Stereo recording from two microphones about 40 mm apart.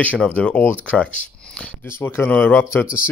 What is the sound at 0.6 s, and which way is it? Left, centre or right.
Speech, left.